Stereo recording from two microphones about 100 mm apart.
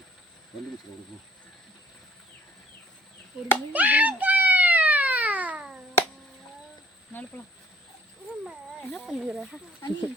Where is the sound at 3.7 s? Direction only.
15° right (ahead or behind).